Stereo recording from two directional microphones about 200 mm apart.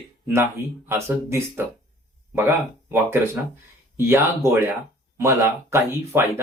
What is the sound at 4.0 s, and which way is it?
Speech, 15° right (ahead or behind).